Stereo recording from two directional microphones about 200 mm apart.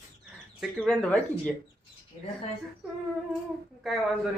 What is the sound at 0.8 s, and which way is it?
Speech, 5° left (ahead or behind).